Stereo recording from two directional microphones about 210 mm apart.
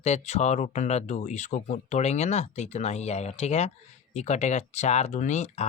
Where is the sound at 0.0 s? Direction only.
30° left (ahead or behind).